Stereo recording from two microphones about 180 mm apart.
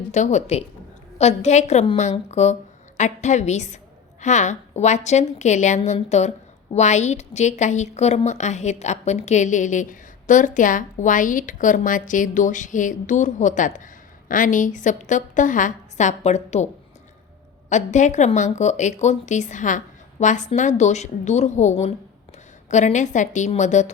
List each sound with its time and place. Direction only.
0.1 s a woman's voice: 40° left (ahead or behind)
17.7 s speech: 40° left (ahead or behind)
22.7 s speech: 40° left (ahead or behind)